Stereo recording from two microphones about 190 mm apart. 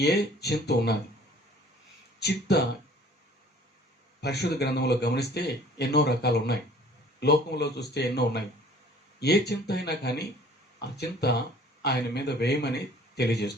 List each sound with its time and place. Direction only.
0.0 s speech: 60° left (ahead or behind)
2.1 s speech: 60° left (ahead or behind)
4.2 s speech: 60° left (ahead or behind)
9.5 s speech: 60° left (ahead or behind)